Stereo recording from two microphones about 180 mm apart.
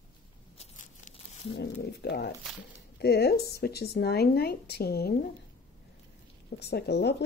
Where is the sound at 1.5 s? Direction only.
65° left (ahead or behind).